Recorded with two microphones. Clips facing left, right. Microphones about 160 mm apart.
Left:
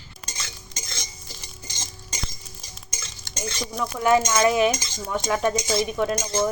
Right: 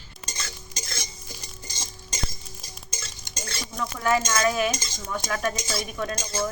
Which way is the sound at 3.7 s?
20° left (ahead or behind).